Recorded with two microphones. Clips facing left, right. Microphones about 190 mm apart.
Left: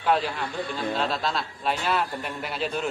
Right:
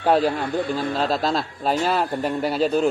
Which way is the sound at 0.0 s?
40° right (ahead or behind).